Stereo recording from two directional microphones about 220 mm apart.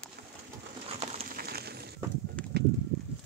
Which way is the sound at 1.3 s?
45° right (ahead or behind).